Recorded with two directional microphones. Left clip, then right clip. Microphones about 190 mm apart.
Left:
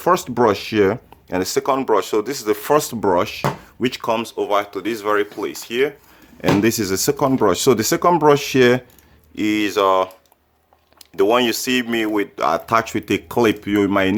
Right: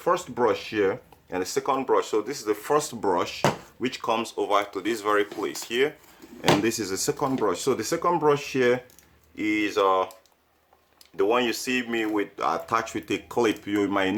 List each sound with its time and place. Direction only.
0.0 s speech: 50° left (ahead or behind); by 5.9 s 30° left (ahead or behind)
6.6 s speech: 40° left (ahead or behind)
11.2 s speech: 50° left (ahead or behind)